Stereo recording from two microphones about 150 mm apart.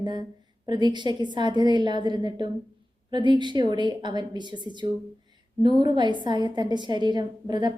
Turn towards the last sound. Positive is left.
turn(degrees=-30)  # may be behind; listen again after turning